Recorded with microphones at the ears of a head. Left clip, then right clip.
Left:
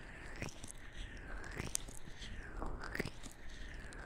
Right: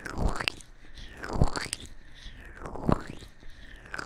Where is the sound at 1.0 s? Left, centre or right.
Right.